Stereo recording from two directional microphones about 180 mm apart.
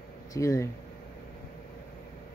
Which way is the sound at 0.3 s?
15° left (ahead or behind).